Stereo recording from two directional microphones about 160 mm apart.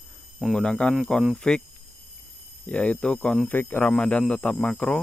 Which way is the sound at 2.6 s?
10° left (ahead or behind).